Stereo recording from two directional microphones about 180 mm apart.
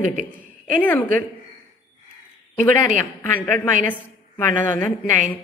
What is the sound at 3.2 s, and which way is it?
A woman's voice, 5° left (ahead or behind).